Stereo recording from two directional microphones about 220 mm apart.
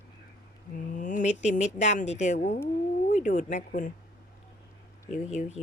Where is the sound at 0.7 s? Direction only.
35° left (ahead or behind).